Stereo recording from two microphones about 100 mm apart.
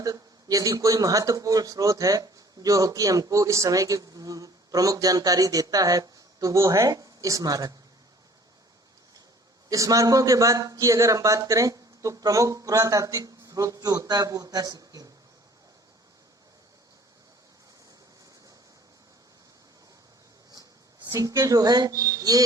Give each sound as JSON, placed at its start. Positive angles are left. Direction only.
{"t": 0.0, "sound": "a man's voice", "side_deg": -35}
{"t": 9.6, "sound": "a man's voice", "side_deg": -35}
{"t": 20.5, "sound": "speech", "side_deg": -40}